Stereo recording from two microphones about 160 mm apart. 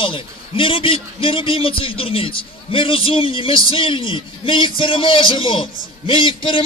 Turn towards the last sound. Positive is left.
turn(degrees=35)  # may be behind; listen again after turning